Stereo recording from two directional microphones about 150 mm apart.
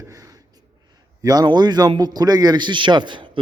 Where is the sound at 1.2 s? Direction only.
25° right (ahead or behind).